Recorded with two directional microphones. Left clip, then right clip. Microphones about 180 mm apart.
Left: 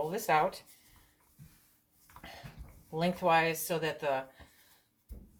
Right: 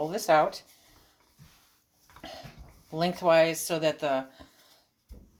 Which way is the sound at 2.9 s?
45° right (ahead or behind).